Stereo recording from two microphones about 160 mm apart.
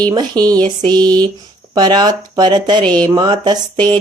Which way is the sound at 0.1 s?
25° right (ahead or behind).